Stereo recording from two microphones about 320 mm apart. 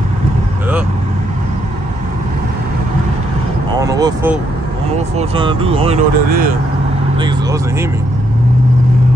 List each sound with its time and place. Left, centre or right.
3.7 s vehicle: centre
5.1 s speech: centre